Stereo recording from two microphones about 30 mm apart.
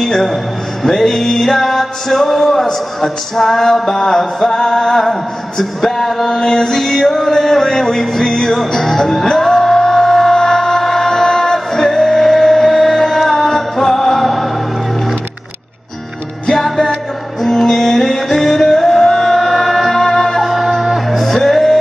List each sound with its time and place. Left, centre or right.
0.0 s music: centre
16.5 s music: centre
20.4 s music: centre
21.2 s music: centre